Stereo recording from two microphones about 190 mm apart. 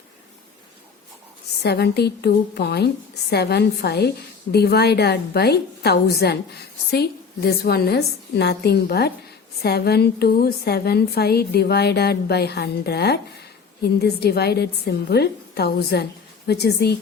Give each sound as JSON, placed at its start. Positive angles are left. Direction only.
{"t": 1.6, "sound": "a woman's voice", "side_deg": 60}